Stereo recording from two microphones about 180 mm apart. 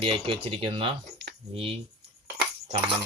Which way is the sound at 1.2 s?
75° right (ahead or behind).